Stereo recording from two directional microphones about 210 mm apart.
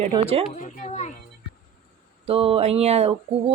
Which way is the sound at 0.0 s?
30° right (ahead or behind).